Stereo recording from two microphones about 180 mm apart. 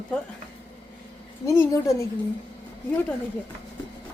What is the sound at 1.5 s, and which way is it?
Speech, 15° left (ahead or behind).